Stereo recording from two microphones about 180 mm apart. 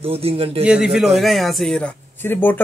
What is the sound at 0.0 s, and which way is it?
Speech, 35° right (ahead or behind).